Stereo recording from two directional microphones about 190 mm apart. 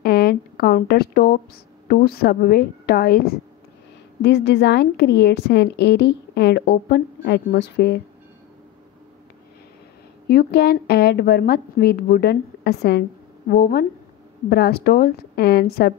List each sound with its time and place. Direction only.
0.0 s a sound: 55° left (ahead or behind)
1.9 s a woman's voice: 55° left (ahead or behind)
10.2 s a woman's voice: 55° left (ahead or behind)